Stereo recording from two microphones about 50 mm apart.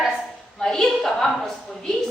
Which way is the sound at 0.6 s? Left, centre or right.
Centre.